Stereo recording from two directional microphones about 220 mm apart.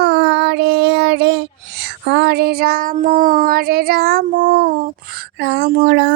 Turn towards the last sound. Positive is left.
turn(degrees=-55)  # may be behind; listen again after turning